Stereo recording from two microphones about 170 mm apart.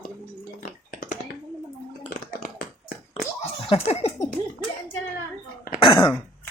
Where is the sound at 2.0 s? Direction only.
50° left (ahead or behind).